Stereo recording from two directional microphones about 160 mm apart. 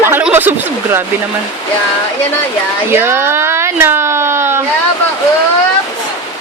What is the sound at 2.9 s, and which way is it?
Speech, 15° right (ahead or behind).